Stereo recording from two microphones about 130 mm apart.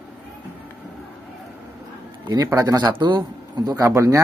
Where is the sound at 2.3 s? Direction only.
25° right (ahead or behind).